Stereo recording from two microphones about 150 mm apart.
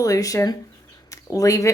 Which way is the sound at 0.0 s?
20° left (ahead or behind).